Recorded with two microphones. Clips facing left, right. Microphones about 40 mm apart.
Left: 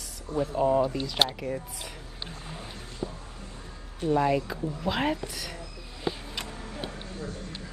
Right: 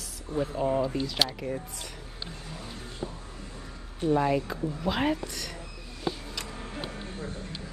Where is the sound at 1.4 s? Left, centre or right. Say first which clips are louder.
Left 1 dB; right.